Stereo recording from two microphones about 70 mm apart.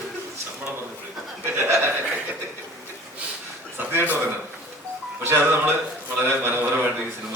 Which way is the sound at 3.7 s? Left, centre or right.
Right.